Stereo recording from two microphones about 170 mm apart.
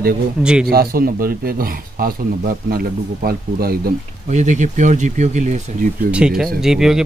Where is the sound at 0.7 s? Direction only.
60° right (ahead or behind).